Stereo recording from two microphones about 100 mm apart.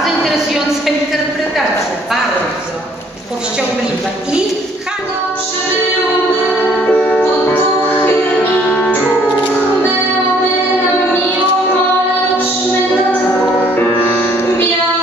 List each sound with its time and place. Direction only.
6.6 s music: 10° left (ahead or behind)
13.7 s music: 15° left (ahead or behind)